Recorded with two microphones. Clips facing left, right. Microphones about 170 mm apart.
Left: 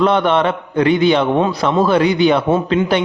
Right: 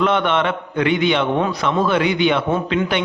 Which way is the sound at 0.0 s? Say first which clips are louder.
Left 4 dB; 35° left (ahead or behind).